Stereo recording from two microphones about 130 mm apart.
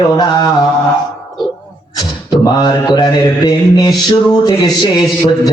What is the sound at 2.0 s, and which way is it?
Mantra, 30° left (ahead or behind).